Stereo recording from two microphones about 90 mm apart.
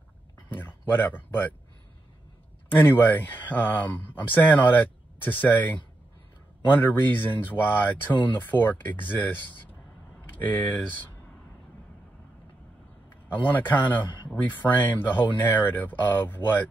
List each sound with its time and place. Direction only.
0.5 s speech: 25° left (ahead or behind)
2.7 s speech: 20° left (ahead or behind)
6.8 s speech: 20° left (ahead or behind)
13.1 s a man's voice: 20° left (ahead or behind)